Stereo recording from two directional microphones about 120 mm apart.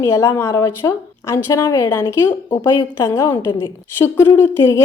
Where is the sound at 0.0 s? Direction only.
25° left (ahead or behind).